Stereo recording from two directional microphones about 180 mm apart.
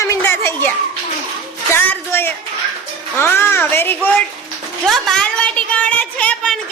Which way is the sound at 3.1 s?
10° left (ahead or behind).